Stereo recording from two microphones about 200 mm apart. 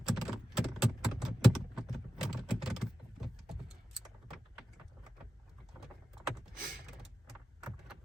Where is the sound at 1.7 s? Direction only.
Centre (ahead or behind).